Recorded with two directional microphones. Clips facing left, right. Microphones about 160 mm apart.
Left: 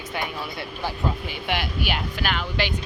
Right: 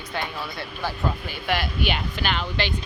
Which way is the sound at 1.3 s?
20° left (ahead or behind).